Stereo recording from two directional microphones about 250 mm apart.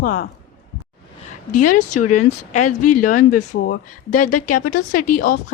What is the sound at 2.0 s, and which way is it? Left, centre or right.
Speech, left.